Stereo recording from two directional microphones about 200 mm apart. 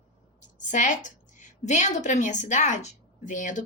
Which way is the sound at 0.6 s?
40° left (ahead or behind).